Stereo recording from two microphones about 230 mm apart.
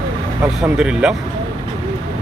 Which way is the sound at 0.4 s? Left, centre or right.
Centre.